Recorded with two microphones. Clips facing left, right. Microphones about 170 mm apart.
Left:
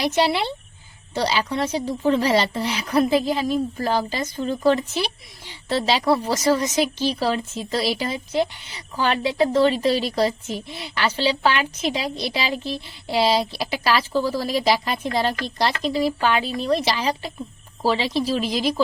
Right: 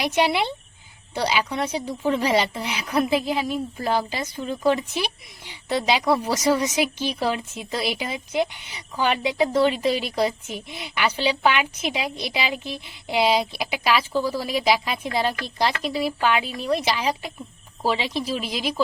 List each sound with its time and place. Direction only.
0.0 s a woman's voice: 15° right (ahead or behind)
18.2 s speech: 35° left (ahead or behind)
18.4 s a woman's voice: 10° right (ahead or behind)